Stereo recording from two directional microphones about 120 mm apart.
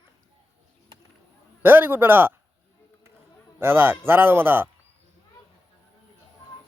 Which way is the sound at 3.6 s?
15° right (ahead or behind).